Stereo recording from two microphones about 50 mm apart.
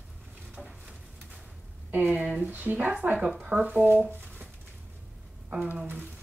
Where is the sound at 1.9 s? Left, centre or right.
Right.